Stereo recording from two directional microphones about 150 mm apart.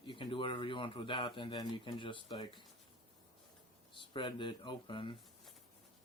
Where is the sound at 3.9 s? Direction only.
30° left (ahead or behind).